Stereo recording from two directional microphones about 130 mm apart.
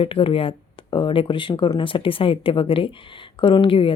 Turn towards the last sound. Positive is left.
turn(degrees=45)  # may be behind; listen again after turning